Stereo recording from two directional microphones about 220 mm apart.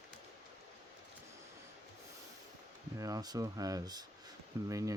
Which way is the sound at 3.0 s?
15° right (ahead or behind).